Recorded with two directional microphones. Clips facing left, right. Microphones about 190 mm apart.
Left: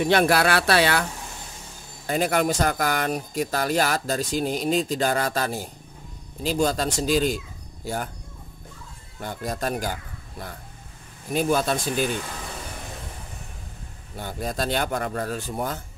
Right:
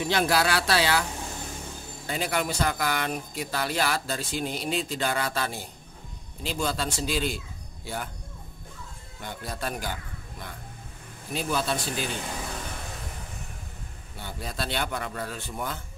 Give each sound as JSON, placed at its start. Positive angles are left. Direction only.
{"t": 0.0, "sound": "speech", "side_deg": 60}
{"t": 2.0, "sound": "speech", "side_deg": 45}
{"t": 9.2, "sound": "speech", "side_deg": 40}
{"t": 11.3, "sound": "speech", "side_deg": 50}
{"t": 14.1, "sound": "speech", "side_deg": 45}